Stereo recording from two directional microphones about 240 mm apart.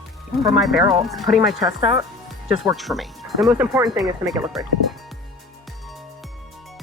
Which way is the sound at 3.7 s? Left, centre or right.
Centre.